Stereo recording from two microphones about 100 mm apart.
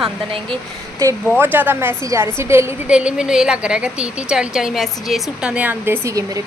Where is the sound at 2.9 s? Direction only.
10° right (ahead or behind).